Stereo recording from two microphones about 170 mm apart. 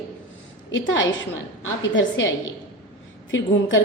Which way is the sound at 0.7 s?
90° left.